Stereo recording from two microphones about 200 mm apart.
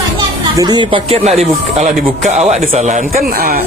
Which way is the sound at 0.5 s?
20° right (ahead or behind).